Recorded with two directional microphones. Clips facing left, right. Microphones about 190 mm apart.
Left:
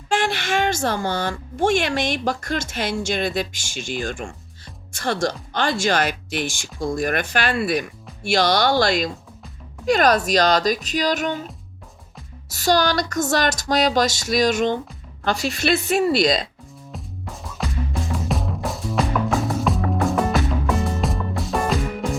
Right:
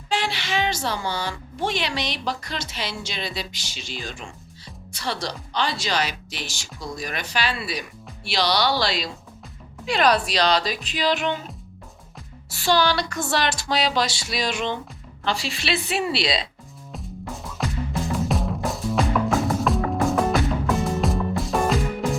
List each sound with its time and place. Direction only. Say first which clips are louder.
0.1 s speech: left 4 dB; 50° left (ahead or behind)
12.5 s speech: left 2 dB; 40° left (ahead or behind)
16.9 s music: right 2 dB; centre (ahead or behind)